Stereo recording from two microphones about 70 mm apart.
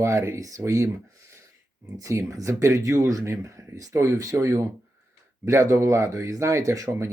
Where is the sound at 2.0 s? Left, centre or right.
Right.